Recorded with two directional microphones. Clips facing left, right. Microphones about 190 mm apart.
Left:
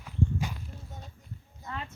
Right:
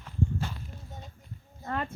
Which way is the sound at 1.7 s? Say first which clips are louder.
Right 6 dB; 55° right (ahead or behind).